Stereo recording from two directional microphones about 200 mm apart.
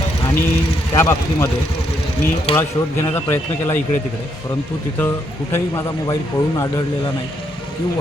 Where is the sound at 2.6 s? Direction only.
10° left (ahead or behind).